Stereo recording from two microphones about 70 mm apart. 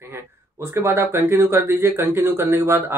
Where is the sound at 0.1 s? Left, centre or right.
Right.